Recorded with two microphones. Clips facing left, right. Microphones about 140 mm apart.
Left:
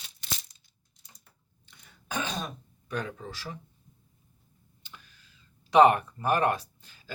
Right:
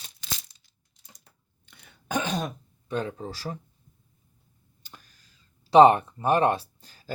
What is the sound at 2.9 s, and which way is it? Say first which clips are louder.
Speech: right 4 dB; 30° right (ahead or behind).